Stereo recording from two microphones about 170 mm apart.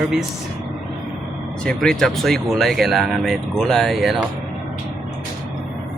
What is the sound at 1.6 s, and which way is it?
Speech, 5° left (ahead or behind).